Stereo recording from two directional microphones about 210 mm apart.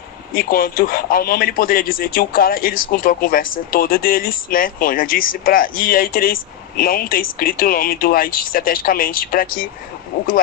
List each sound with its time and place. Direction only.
0.3 s speech: 45° left (ahead or behind)